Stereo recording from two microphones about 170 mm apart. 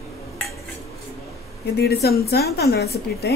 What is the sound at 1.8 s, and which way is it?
A woman's voice, 70° left (ahead or behind).